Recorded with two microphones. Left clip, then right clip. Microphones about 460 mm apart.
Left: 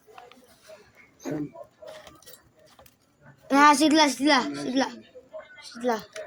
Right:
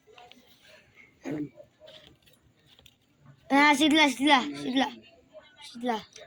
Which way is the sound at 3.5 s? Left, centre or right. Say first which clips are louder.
Left 3 dB; right.